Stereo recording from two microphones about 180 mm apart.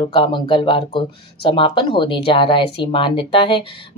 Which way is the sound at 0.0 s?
30° left (ahead or behind).